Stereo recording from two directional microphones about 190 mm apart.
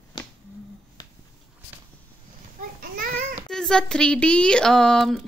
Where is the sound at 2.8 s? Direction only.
50° right (ahead or behind).